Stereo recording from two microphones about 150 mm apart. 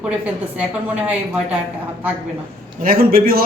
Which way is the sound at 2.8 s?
75° right (ahead or behind).